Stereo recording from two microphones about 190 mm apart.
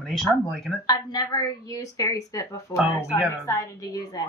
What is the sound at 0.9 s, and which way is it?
Speech, 20° left (ahead or behind).